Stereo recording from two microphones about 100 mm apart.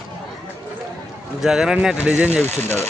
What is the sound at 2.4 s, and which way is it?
Speech, 25° left (ahead or behind).